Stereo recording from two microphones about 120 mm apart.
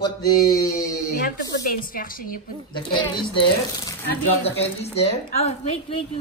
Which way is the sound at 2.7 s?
40° left (ahead or behind).